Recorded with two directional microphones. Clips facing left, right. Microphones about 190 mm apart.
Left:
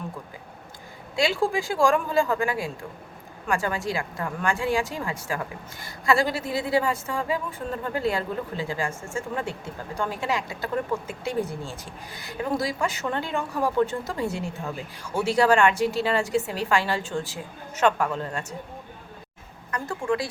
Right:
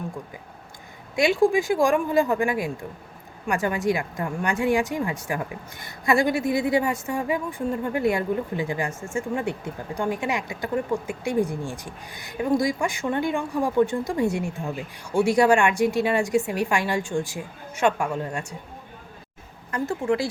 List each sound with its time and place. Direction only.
1.1 s a woman's voice: 20° right (ahead or behind)
19.7 s speech: 25° right (ahead or behind)